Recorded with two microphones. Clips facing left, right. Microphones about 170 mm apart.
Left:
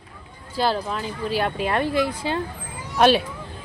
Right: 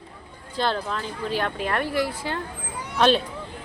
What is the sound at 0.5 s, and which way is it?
Speech, 5° left (ahead or behind).